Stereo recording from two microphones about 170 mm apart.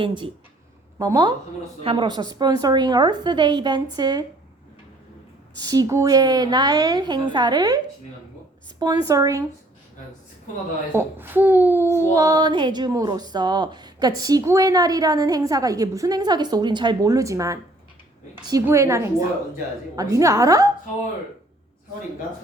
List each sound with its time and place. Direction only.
0.0 s speech: 30° right (ahead or behind)
5.5 s speech: 20° right (ahead or behind)
9.0 s speech: 20° right (ahead or behind)
10.9 s a child's voice: 10° right (ahead or behind)
18.6 s a child's voice: 15° right (ahead or behind)